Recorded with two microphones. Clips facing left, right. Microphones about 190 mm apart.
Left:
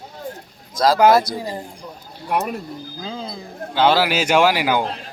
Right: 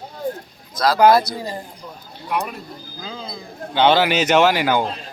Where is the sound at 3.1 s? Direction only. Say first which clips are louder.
Left 3 dB; 30° left (ahead or behind).